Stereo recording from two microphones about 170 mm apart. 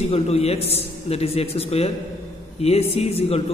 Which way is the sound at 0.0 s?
35° left (ahead or behind).